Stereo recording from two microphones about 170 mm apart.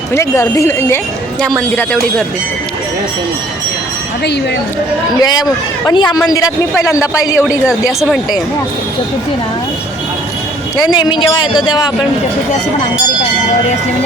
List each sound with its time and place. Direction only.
0.1 s speech: 15° left (ahead or behind)
1.4 s speech: centre (ahead or behind)
5.2 s a man's voice: 25° left (ahead or behind)
7.7 s speech: 5° right (ahead or behind)
10.8 s a man's voice: 25° left (ahead or behind)